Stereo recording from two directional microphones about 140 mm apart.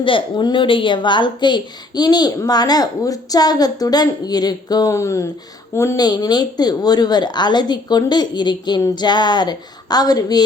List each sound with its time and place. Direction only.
0.0 s a woman's voice: 35° left (ahead or behind)